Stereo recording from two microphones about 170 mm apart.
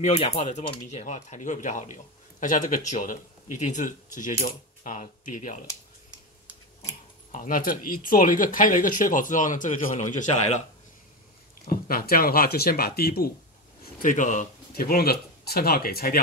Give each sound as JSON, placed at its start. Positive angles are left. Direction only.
{"t": 0.0, "sound": "speech", "side_deg": 40}
{"t": 7.3, "sound": "speech", "side_deg": 50}
{"t": 11.6, "sound": "speech", "side_deg": 60}
{"t": 14.0, "sound": "speech", "side_deg": 50}